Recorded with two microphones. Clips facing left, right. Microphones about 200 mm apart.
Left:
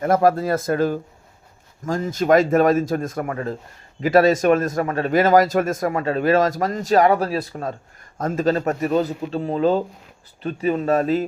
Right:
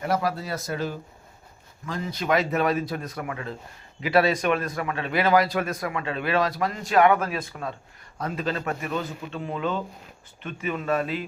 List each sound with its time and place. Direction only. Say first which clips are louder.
0.0 s a man's voice: left 9 dB; 50° left (ahead or behind)